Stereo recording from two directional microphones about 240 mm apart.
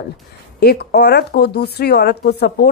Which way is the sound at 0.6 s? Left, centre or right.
Left.